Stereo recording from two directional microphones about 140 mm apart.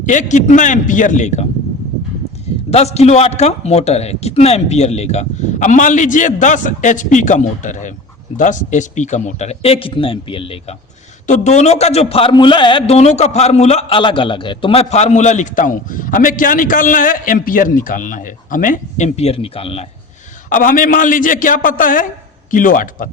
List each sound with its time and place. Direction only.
0.0 s a man's voice: 65° left (ahead or behind)
2.6 s a man's voice: 50° left (ahead or behind)
11.3 s a man's voice: 55° left (ahead or behind)
20.5 s a man's voice: 75° left (ahead or behind)